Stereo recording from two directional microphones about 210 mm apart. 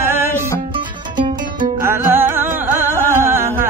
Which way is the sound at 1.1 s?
20° right (ahead or behind).